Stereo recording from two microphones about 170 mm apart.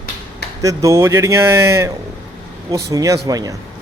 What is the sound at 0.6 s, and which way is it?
A man's voice, 20° right (ahead or behind).